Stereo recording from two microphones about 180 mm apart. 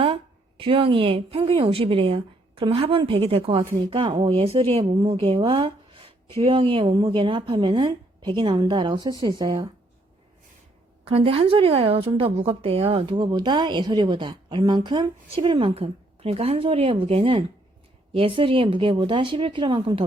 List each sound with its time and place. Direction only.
0.0 s a woman's voice: 30° right (ahead or behind)
11.0 s a woman's voice: 30° right (ahead or behind)